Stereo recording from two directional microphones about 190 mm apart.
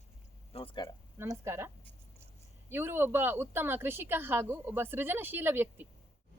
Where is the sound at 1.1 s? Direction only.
15° right (ahead or behind).